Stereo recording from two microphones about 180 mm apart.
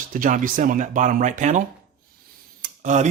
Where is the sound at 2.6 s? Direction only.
40° right (ahead or behind).